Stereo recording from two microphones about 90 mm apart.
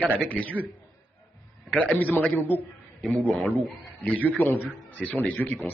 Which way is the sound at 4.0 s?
20° left (ahead or behind).